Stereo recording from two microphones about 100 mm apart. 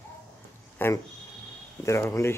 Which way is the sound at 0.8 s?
20° left (ahead or behind).